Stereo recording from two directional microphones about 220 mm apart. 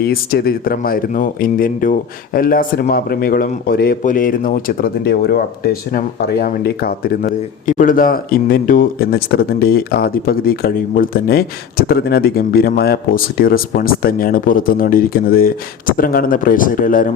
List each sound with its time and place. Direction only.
0.0 s speech: 45° left (ahead or behind)